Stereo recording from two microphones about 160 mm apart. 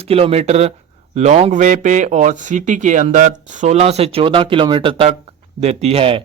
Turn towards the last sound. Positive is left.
turn(degrees=-35)  # may be behind; listen again after turning